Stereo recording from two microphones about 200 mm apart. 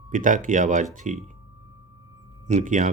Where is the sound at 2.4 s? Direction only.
40° right (ahead or behind).